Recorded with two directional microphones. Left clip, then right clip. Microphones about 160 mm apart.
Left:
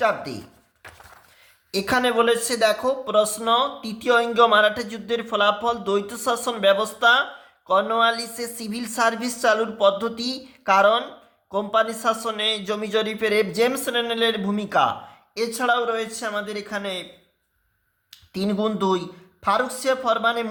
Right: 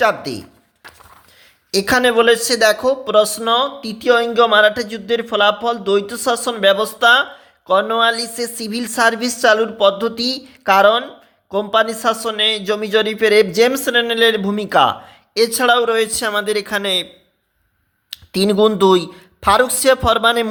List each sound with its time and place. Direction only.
0.0 s speech: 40° right (ahead or behind)
1.7 s a woman's voice: 40° right (ahead or behind); by 17.1 s 55° right (ahead or behind)
18.1 s speech: 55° right (ahead or behind)